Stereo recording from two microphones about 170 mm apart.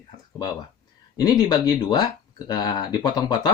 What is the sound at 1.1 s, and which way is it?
Speech, 25° left (ahead or behind).